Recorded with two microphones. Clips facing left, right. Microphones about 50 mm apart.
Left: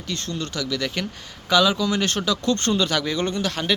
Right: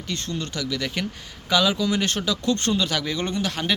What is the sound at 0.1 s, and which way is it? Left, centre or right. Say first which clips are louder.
Speech: left 1 dB; centre.